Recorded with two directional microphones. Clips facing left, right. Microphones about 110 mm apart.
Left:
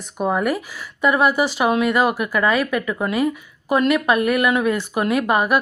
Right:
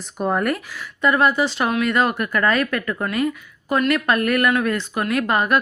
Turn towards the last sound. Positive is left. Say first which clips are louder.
# left 2 dB
turn(degrees=10)  # may be behind; listen again after turning